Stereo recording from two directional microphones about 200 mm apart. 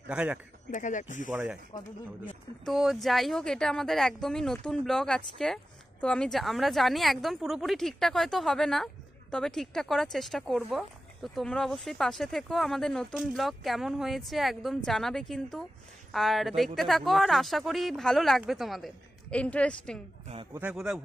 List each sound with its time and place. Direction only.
0.1 s speech: 5° right (ahead or behind)
0.7 s speech: 40° left (ahead or behind)
1.3 s speech: 10° right (ahead or behind)
2.2 s speech: centre (ahead or behind)
20.5 s speech: 5° right (ahead or behind)